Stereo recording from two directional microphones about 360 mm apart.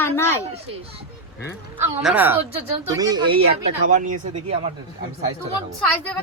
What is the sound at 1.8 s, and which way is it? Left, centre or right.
Speech, centre.